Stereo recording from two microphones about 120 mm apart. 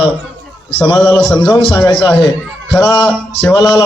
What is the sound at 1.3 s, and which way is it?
Speech, 30° left (ahead or behind).